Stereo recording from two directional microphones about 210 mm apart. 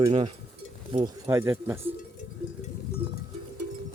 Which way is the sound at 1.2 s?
10° right (ahead or behind).